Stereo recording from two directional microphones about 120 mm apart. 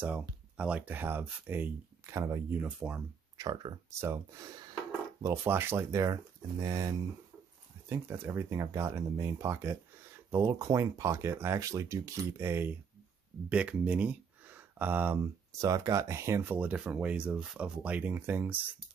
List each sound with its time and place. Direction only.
0.0 s speech: 15° right (ahead or behind)
3.3 s speech: 35° right (ahead or behind)
3.9 s speech: 20° right (ahead or behind)
15.5 s speech: 30° right (ahead or behind)